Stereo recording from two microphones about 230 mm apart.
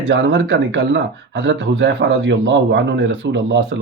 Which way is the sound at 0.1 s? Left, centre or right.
Right.